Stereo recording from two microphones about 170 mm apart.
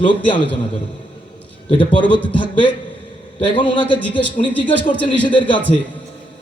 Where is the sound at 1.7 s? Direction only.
30° left (ahead or behind).